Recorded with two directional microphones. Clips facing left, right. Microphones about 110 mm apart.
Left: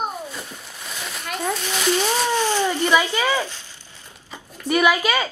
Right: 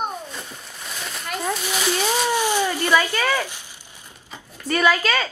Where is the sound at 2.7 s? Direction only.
15° left (ahead or behind).